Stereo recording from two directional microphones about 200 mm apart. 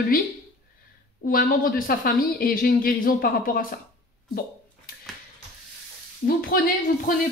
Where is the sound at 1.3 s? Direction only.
45° left (ahead or behind).